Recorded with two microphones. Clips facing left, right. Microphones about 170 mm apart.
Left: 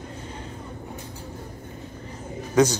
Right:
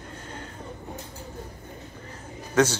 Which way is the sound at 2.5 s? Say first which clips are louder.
Left 3 dB; 10° left (ahead or behind).